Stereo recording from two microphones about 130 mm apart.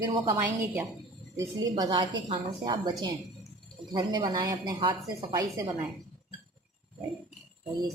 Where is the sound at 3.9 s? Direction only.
35° right (ahead or behind).